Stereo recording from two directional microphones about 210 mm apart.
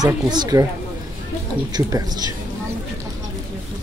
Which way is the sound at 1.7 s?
20° right (ahead or behind).